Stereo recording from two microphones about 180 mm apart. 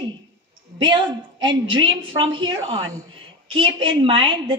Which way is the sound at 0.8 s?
25° right (ahead or behind).